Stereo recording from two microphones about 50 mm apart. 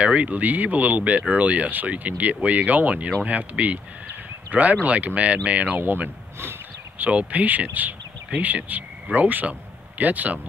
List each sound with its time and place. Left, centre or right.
0.0 s speech: right
7.0 s speech: right